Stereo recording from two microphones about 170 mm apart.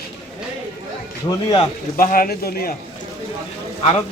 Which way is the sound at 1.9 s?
55° left (ahead or behind).